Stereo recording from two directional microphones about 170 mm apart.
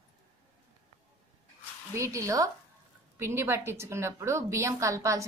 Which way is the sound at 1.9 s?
15° right (ahead or behind).